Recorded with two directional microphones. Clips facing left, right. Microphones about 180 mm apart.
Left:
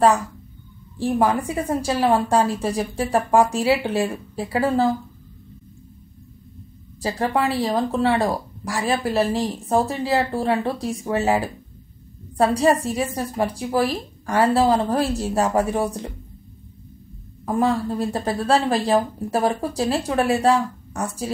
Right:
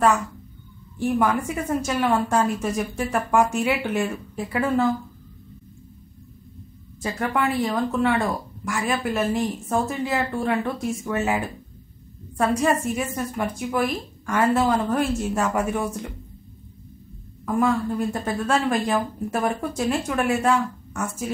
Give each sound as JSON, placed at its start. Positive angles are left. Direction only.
{"t": 0.9, "sound": "speech", "side_deg": 35}
{"t": 7.0, "sound": "speech", "side_deg": 35}
{"t": 17.5, "sound": "speech", "side_deg": 35}